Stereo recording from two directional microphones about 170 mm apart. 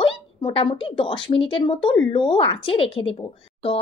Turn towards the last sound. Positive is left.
turn(degrees=30)  # may be behind; listen again after turning